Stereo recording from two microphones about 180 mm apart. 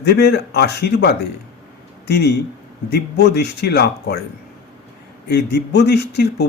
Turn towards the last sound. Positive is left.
turn(degrees=70)  # may be behind; listen again after turning